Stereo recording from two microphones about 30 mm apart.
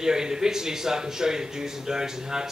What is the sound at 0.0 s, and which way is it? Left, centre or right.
Speech, centre.